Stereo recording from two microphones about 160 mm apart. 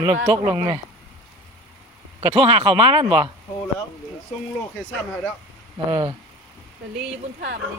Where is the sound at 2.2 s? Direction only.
35° right (ahead or behind).